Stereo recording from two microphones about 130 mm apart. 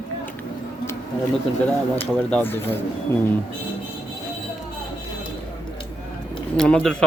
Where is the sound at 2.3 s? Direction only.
15° left (ahead or behind).